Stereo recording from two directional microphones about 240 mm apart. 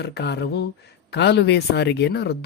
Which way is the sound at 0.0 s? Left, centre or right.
Left.